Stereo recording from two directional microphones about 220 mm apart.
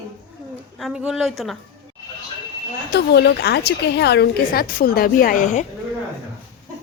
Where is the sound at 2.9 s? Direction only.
50° left (ahead or behind); by 5.6 s 35° left (ahead or behind).